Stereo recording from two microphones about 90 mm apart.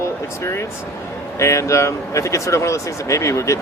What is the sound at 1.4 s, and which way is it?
Speech, 35° left (ahead or behind).